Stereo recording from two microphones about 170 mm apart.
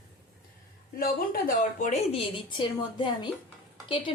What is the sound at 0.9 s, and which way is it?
Speech, 60° left (ahead or behind).